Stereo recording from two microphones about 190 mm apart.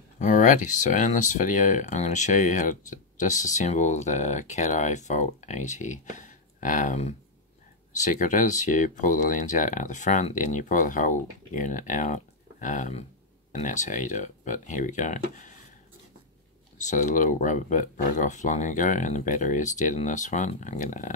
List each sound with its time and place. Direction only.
0.2 s speech: 40° left (ahead or behind)
16.7 s speech: 40° left (ahead or behind)